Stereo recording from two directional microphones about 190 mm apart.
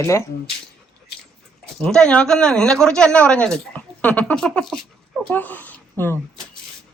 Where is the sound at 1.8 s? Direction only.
5° left (ahead or behind).